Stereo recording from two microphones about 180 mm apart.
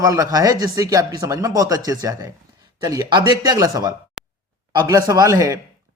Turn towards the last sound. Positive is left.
turn(degrees=-20)  # may be behind; listen again after turning